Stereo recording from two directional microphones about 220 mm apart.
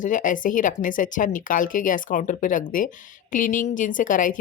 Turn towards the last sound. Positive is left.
turn(degrees=35)  # may be behind; listen again after turning